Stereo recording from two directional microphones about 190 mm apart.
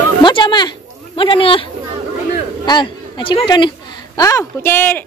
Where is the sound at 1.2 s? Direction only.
25° left (ahead or behind).